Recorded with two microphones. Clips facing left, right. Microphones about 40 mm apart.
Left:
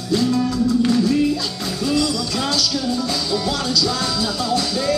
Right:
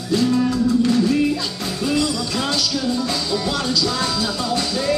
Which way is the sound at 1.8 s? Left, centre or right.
Right.